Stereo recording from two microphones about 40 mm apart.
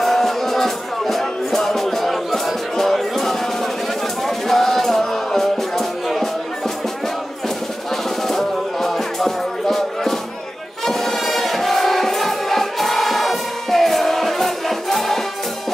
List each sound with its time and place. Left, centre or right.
0.0 s music: centre
7.4 s music: centre